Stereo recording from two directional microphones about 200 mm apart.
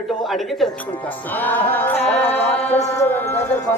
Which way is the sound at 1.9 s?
30° left (ahead or behind).